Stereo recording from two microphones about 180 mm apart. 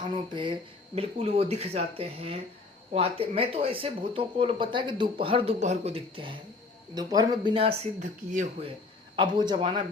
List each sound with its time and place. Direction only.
0.0 s speech: 25° right (ahead or behind); by 8.7 s 45° right (ahead or behind)
9.1 s speech: 25° right (ahead or behind)